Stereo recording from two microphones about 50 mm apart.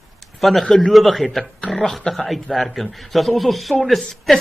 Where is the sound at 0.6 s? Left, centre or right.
Centre.